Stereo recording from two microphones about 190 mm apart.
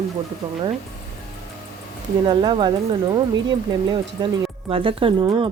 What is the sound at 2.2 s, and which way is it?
Speech, 25° right (ahead or behind).